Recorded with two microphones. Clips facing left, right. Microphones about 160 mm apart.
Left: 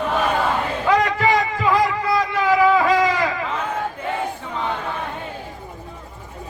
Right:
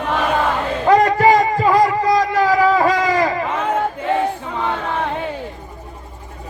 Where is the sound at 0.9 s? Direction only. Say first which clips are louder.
Right 6 dB; 40° right (ahead or behind).